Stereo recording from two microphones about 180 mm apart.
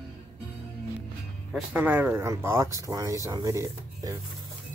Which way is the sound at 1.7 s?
10° right (ahead or behind).